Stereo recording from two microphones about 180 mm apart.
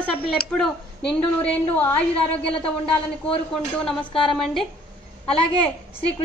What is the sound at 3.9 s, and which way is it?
Speech, centre (ahead or behind).